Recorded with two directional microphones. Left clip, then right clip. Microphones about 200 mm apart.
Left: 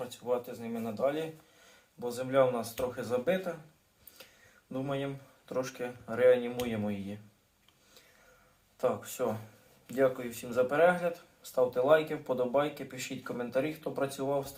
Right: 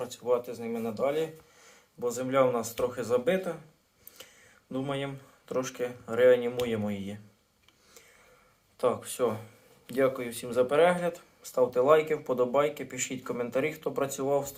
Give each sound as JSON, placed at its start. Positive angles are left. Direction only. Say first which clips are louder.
{"t": 0.1, "sound": "speech", "louder": "right 6 dB", "side_deg": -35}
{"t": 4.7, "sound": "speech", "louder": "right 2 dB", "side_deg": -40}
{"t": 8.8, "sound": "speech", "louder": "right 4 dB", "side_deg": -45}